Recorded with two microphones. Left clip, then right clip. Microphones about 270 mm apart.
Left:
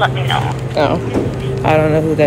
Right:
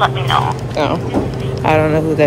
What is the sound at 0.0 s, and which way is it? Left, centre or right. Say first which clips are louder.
Speech: right 2 dB; centre.